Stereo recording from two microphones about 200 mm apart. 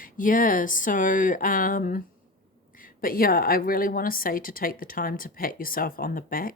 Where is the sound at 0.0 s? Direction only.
45° left (ahead or behind).